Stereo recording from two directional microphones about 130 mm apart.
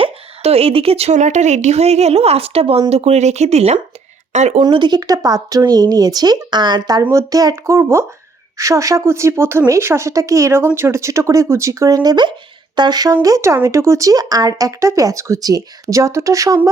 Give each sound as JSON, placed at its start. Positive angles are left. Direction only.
{"t": 0.0, "sound": "a woman's voice", "side_deg": -50}
{"t": 4.6, "sound": "speech", "side_deg": -35}
{"t": 7.0, "sound": "speech", "side_deg": -20}